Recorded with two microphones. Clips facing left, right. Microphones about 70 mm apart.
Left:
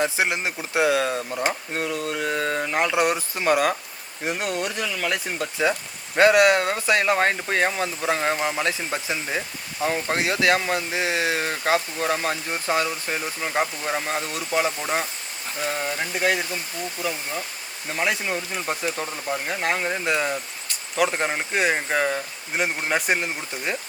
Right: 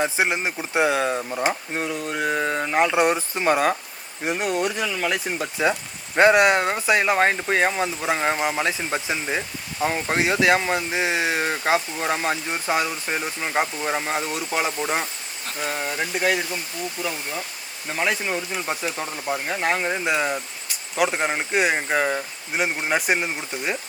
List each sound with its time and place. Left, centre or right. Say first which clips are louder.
0.0 s speech: right 1 dB; centre
2.9 s speech: right 2 dB; right
4.3 s speech: right 3 dB; centre
6.1 s speech: even; right
14.8 s speech: right 1 dB; centre